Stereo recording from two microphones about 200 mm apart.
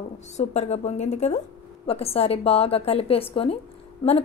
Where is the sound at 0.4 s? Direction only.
35° left (ahead or behind).